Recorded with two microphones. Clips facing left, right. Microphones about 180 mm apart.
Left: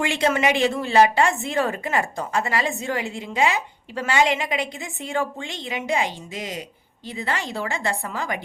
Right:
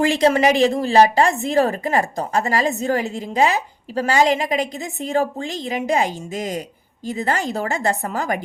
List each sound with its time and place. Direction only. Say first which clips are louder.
0.0 s a woman's voice: right 5 dB; 35° right (ahead or behind)